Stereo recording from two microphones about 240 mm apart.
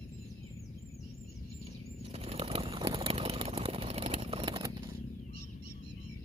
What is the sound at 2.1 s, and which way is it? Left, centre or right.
Vehicle, right.